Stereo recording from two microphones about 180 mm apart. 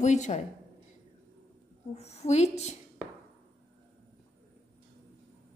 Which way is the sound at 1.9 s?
35° left (ahead or behind).